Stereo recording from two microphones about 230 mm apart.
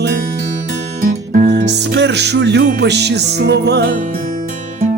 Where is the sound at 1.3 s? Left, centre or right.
Right.